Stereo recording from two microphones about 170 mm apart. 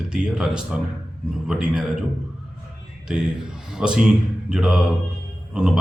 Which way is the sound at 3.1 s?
5° right (ahead or behind).